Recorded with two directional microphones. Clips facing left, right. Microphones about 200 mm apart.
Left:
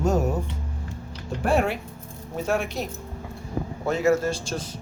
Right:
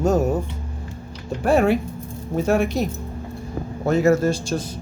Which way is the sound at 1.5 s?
40° right (ahead or behind).